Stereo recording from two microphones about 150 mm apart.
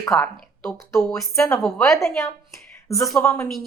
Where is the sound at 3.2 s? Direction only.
15° left (ahead or behind).